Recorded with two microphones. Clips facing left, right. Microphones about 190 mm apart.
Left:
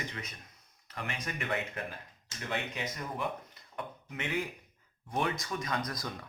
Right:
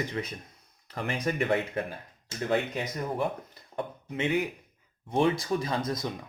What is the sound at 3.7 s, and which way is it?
Speech, 25° right (ahead or behind).